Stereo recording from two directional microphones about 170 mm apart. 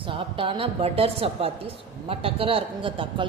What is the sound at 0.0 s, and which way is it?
A woman's voice, 30° right (ahead or behind).